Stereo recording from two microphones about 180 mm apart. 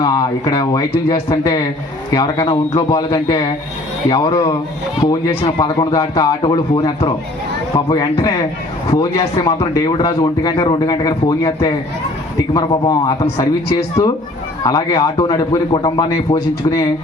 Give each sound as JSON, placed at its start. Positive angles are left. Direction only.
{"t": 0.0, "sound": "a man's voice", "side_deg": 25}
{"t": 2.1, "sound": "a man's voice", "side_deg": 20}